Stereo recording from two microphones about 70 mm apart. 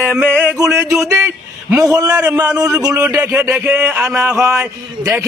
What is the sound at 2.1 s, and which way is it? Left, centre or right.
Speech, right.